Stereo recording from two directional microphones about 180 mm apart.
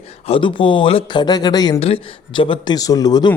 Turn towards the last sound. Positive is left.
turn(degrees=20)  # may be behind; listen again after turning